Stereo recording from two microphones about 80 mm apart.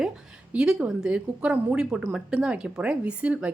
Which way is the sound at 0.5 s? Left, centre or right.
Centre.